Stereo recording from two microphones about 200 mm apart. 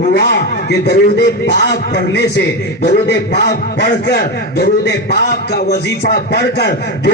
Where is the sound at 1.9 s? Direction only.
55° left (ahead or behind).